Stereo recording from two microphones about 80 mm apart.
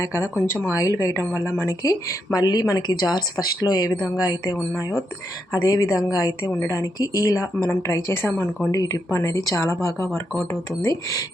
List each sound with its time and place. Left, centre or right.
0.0 s speech: left
0.7 s speech: left
1.6 s speech: left
5.6 s speech: left
6.6 s speech: left
6.8 s speech: left
8.7 s speech: left